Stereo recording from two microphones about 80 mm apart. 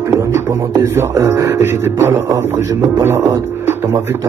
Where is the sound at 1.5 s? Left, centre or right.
Right.